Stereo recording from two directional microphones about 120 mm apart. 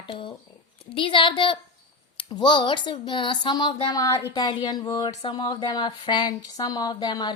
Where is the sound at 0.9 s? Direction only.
45° left (ahead or behind).